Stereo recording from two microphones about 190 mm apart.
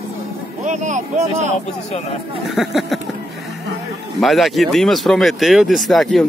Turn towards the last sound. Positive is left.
turn(degrees=0)  # may be behind; listen again after turning